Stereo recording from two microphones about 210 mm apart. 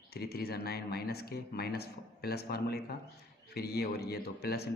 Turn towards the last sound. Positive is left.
turn(degrees=50)  # may be behind; listen again after turning